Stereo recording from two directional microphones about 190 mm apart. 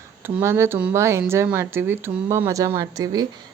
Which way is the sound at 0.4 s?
15° right (ahead or behind).